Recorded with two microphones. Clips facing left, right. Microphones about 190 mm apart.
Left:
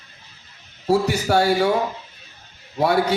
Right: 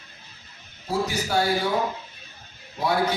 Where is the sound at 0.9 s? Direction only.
65° left (ahead or behind).